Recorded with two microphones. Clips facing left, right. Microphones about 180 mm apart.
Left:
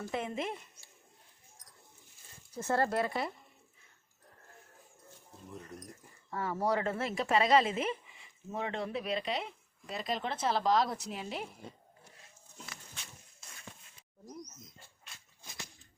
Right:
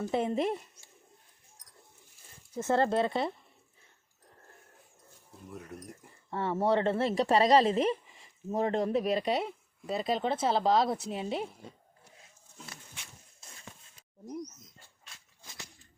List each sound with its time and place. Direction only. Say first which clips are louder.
0.1 s speech: right 7 dB; 35° right (ahead or behind)
2.5 s speech: right 4 dB; 25° right (ahead or behind)
5.5 s speech: right 3 dB; 10° right (ahead or behind)
6.3 s speech: right 4 dB; 25° right (ahead or behind)
9.8 s speech: right 6 dB; 30° right (ahead or behind)